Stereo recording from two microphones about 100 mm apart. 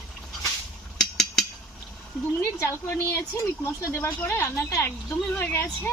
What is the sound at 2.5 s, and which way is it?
Speech, 25° left (ahead or behind).